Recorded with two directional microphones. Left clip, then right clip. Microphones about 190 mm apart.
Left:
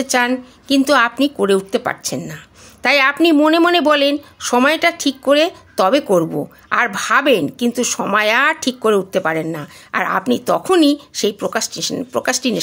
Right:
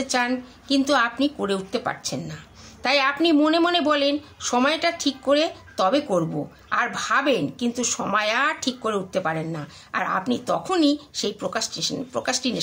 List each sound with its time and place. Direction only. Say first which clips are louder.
0.0 s a woman's voice: left 7 dB; 45° left (ahead or behind)